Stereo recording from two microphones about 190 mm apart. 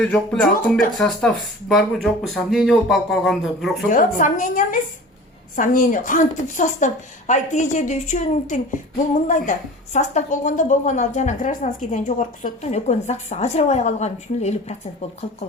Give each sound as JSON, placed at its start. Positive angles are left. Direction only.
{"t": 0.0, "sound": "speech", "side_deg": 5}
{"t": 3.8, "sound": "a woman's voice", "side_deg": 45}